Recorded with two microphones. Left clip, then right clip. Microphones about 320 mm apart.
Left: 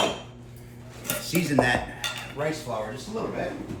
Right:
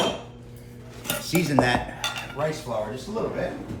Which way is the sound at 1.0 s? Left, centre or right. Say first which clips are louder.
Right 2 dB; centre.